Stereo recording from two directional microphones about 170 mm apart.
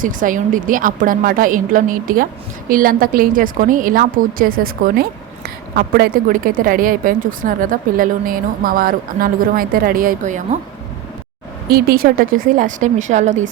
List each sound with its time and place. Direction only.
0.0 s a woman's voice: 50° right (ahead or behind)
11.7 s a woman's voice: 60° right (ahead or behind); by 13.5 s 45° right (ahead or behind)